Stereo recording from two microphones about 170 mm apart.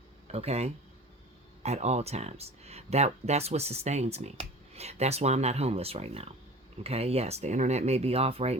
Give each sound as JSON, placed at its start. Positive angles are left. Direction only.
{"t": 0.3, "sound": "speech", "side_deg": -35}